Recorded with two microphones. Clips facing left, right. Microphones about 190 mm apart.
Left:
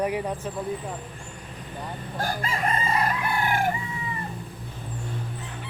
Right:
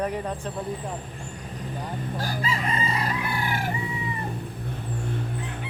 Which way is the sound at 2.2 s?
50° left (ahead or behind).